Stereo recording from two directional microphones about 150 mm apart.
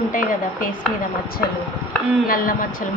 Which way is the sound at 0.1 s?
65° left (ahead or behind).